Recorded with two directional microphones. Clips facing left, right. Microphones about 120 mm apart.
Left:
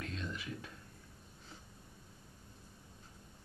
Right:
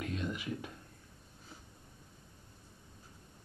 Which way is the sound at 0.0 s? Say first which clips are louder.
Right 5 dB; 15° right (ahead or behind).